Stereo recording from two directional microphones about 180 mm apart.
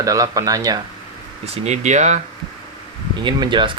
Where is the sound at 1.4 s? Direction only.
35° right (ahead or behind).